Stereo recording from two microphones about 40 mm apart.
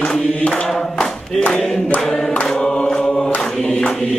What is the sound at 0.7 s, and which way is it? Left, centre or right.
Clapping, centre.